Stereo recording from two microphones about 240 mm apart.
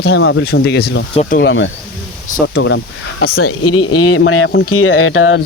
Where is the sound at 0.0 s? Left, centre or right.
Left.